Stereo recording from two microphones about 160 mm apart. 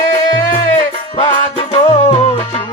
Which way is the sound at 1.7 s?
40° left (ahead or behind).